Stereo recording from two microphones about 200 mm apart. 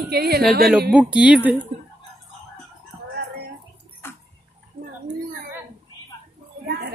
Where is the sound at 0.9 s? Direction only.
5° right (ahead or behind).